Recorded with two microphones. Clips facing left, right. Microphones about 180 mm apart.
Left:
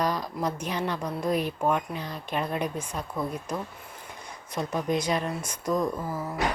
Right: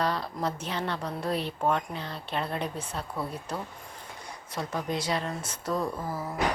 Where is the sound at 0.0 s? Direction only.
15° left (ahead or behind).